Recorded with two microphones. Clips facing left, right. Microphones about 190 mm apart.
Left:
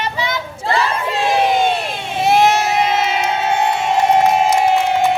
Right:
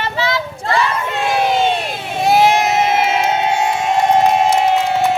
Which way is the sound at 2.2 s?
Centre (ahead or behind).